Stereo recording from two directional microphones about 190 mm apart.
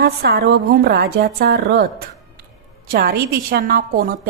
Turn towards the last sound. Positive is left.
turn(degrees=-50)  # may be behind; listen again after turning